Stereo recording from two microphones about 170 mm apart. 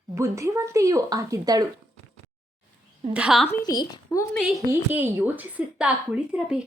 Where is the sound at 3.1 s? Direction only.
5° right (ahead or behind).